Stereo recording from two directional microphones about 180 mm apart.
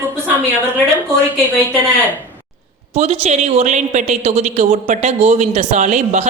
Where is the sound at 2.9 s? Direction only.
35° right (ahead or behind).